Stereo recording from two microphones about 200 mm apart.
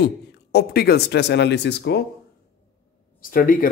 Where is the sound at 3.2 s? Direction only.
45° left (ahead or behind).